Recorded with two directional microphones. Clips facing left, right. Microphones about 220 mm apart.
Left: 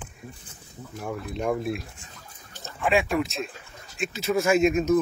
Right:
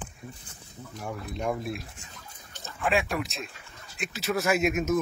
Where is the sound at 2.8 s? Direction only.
Centre (ahead or behind).